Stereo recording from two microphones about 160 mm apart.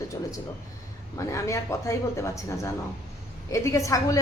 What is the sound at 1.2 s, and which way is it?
A woman's voice, 20° left (ahead or behind).